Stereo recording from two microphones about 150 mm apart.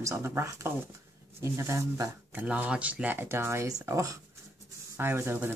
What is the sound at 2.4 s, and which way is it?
Speech, 10° right (ahead or behind).